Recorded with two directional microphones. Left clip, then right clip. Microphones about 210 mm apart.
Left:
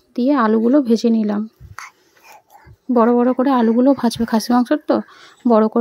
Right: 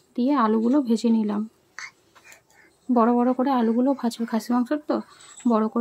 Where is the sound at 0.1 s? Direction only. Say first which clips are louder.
Left 6 dB; 25° left (ahead or behind).